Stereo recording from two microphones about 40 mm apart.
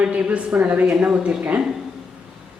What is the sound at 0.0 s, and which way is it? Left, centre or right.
Speech, right.